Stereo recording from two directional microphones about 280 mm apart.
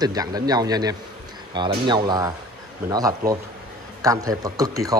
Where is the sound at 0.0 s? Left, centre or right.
Centre.